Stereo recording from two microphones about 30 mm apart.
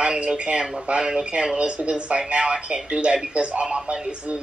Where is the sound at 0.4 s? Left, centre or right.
Right.